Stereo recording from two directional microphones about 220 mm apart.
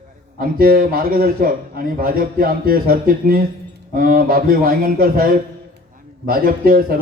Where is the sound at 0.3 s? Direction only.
40° right (ahead or behind).